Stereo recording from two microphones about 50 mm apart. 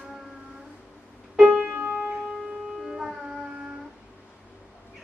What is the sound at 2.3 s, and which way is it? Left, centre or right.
Music, centre.